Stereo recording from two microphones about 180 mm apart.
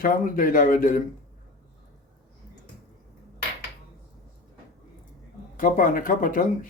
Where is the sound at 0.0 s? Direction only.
50° left (ahead or behind).